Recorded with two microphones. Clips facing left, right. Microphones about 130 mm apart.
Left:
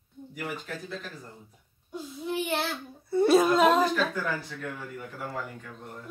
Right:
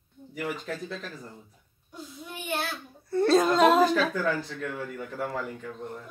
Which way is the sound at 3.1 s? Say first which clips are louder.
Left 1 dB; 10° left (ahead or behind).